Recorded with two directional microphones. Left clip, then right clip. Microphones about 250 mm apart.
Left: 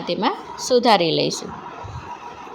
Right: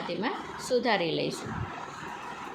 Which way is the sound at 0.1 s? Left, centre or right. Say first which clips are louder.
Left 14 dB; left.